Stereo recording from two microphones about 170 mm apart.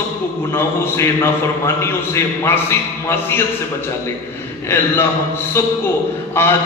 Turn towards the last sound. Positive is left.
turn(degrees=15)  # may be behind; listen again after turning